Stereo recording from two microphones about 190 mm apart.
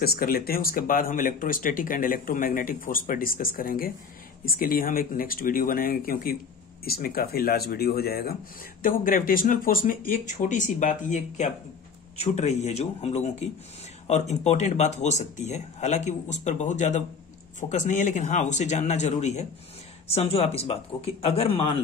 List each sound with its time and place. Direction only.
0.0 s speech: 55° left (ahead or behind); by 21.7 s 30° left (ahead or behind)